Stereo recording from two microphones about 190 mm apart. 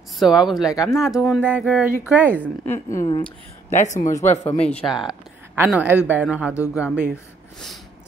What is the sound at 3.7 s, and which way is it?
Speech, 40° left (ahead or behind).